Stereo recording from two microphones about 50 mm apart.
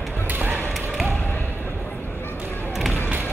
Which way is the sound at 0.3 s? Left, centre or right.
Right.